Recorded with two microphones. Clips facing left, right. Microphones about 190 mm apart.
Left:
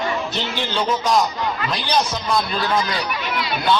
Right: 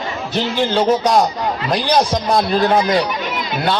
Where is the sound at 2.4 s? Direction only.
50° right (ahead or behind).